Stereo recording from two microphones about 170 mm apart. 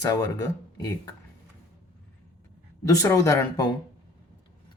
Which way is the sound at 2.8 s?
20° left (ahead or behind).